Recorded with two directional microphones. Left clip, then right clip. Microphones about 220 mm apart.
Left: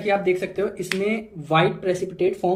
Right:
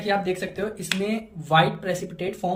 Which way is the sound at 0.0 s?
5° left (ahead or behind).